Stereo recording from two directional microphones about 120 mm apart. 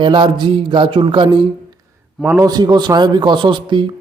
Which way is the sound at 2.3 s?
30° right (ahead or behind).